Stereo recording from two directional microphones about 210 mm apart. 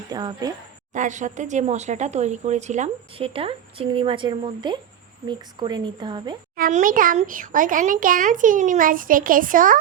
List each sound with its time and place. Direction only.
0.1 s speech: 20° right (ahead or behind)
0.9 s speech: 35° right (ahead or behind)
6.6 s speech: 40° right (ahead or behind)